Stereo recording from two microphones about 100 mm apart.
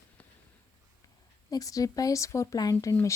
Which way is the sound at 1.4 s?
35° left (ahead or behind).